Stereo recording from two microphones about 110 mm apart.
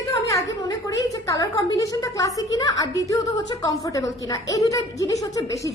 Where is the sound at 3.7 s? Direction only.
30° left (ahead or behind).